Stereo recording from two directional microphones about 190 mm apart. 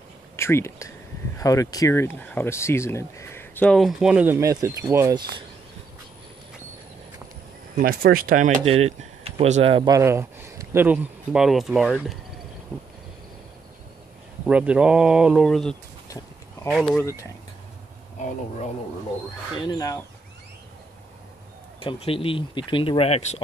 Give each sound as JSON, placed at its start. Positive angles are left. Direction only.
{"t": 0.4, "sound": "speech", "side_deg": 15}
{"t": 7.7, "sound": "speech", "side_deg": -50}
{"t": 9.9, "sound": "speech", "side_deg": -15}
{"t": 14.4, "sound": "speech", "side_deg": -5}
{"t": 19.6, "sound": "speech", "side_deg": 20}
{"t": 21.7, "sound": "speech", "side_deg": 30}